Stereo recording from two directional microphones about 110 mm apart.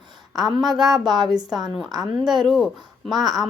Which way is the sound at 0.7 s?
35° right (ahead or behind).